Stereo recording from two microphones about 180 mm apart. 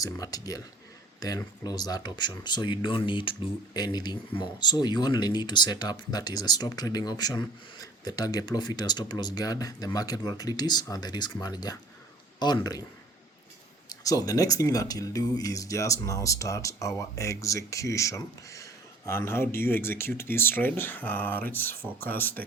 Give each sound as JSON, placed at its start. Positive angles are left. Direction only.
{"t": 0.0, "sound": "speech", "side_deg": 20}
{"t": 14.0, "sound": "speech", "side_deg": 20}